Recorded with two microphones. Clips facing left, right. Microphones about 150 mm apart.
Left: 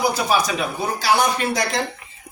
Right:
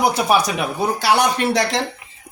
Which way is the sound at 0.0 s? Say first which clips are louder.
Right 3 dB; 65° right (ahead or behind).